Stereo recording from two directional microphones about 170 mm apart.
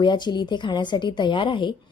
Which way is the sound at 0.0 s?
25° left (ahead or behind).